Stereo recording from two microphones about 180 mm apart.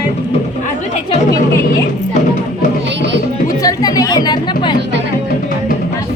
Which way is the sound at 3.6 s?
20° left (ahead or behind).